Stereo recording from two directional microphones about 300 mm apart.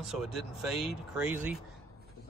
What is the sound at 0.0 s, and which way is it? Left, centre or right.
Speech, centre.